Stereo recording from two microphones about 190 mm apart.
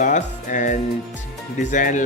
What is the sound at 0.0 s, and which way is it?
Speech, 40° left (ahead or behind).